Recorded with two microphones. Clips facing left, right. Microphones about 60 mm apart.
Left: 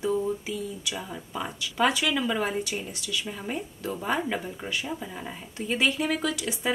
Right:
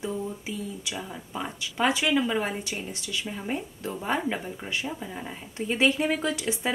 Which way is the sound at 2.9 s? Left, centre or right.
Right.